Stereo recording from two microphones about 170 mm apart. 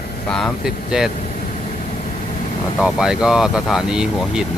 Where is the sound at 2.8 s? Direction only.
5° right (ahead or behind).